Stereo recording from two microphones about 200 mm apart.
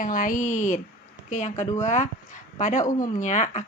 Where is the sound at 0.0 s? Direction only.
40° left (ahead or behind).